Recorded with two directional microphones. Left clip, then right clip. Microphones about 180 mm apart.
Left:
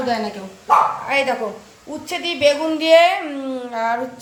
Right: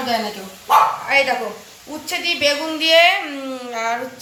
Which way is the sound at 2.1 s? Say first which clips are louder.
Left 1 dB; 45° left (ahead or behind).